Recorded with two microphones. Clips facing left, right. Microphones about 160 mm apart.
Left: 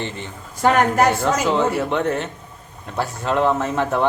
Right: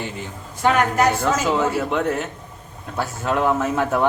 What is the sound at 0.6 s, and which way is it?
Speech, 50° left (ahead or behind).